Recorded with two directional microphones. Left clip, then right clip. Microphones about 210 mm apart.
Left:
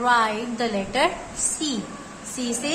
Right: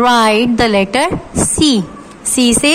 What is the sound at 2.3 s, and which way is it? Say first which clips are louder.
Speech: right 16 dB; 45° right (ahead or behind).